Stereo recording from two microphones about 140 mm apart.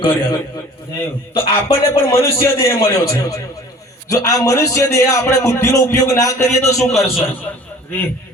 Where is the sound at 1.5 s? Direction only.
20° left (ahead or behind).